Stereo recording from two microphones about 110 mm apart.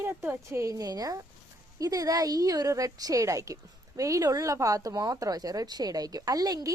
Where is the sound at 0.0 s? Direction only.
20° right (ahead or behind).